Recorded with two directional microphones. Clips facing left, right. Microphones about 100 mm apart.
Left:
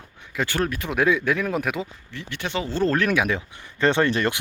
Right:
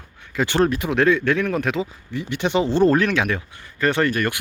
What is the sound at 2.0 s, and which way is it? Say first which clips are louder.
Speech: right 8 dB; 15° right (ahead or behind).